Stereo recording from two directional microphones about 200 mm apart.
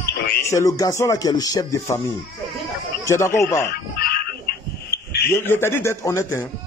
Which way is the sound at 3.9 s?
50° left (ahead or behind).